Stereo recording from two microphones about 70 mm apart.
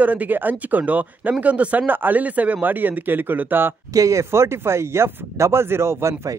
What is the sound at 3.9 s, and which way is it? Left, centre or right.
Speech, right.